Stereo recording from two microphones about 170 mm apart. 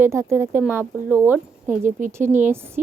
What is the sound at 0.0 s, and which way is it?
A woman's voice, 15° right (ahead or behind).